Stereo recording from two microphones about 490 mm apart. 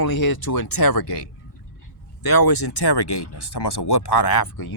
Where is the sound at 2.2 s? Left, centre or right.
Left.